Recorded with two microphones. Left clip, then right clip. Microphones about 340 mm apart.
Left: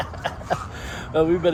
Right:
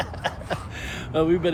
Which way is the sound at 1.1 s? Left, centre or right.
Centre.